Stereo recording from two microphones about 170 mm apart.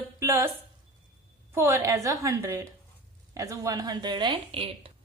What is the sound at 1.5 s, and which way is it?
A woman's voice, 15° right (ahead or behind).